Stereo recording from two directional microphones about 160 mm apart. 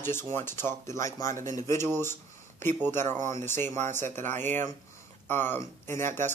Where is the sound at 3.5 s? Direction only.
15° left (ahead or behind).